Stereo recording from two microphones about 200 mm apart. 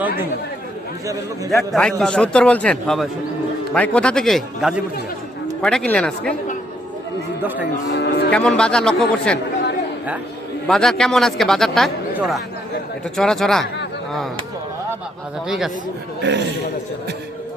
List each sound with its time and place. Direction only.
1.5 s speech: centre (ahead or behind)
7.9 s speech: 55° left (ahead or behind)
8.3 s speech: 5° left (ahead or behind)
10.7 s speech: 5° left (ahead or behind)
15.4 s speech: centre (ahead or behind)
16.2 s a man's voice: 60° right (ahead or behind)